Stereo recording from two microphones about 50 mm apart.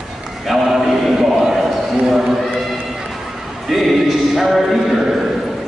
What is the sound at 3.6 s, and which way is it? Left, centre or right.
A man's voice, centre.